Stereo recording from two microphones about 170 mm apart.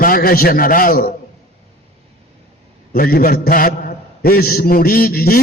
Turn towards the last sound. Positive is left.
turn(degrees=60)  # may be behind; listen again after turning